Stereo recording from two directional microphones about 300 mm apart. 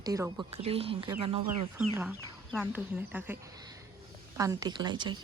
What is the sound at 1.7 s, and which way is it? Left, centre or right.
Speech, centre.